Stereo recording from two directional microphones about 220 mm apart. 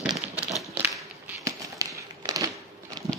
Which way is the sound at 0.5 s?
Centre (ahead or behind).